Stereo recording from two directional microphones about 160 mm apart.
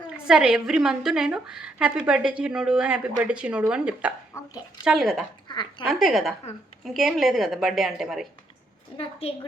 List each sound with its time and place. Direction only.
0.3 s a woman's voice: 5° right (ahead or behind)
9.0 s a woman's voice: 35° left (ahead or behind)